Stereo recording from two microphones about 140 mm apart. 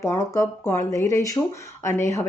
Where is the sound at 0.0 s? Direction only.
20° left (ahead or behind).